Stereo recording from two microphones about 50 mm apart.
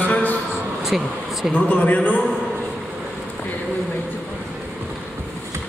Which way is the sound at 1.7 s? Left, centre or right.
Left.